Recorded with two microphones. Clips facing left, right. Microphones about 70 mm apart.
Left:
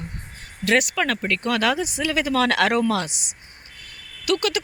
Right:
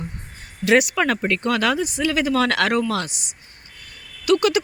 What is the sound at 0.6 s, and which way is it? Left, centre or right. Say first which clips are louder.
Speech: right 3 dB; centre.